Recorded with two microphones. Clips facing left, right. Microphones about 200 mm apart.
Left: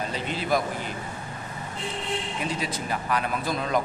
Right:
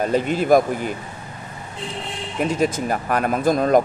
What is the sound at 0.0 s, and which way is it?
Speech, 50° right (ahead or behind).